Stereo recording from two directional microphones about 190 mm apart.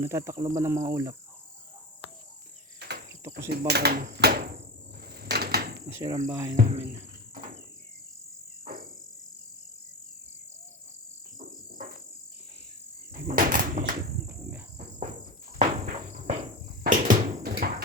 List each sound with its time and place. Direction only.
0.0 s speech: 15° right (ahead or behind)
2.7 s insect: 60° right (ahead or behind)
3.7 s speech: 55° right (ahead or behind)
5.1 s a sound: 55° right (ahead or behind)
5.9 s speech: 15° right (ahead or behind)
6.7 s music: 30° right (ahead or behind)
13.3 s insect: 45° right (ahead or behind)
15.5 s insect: 35° right (ahead or behind)
16.8 s a sound: 45° right (ahead or behind)